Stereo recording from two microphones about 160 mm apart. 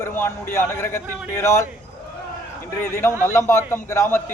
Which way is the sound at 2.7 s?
15° left (ahead or behind).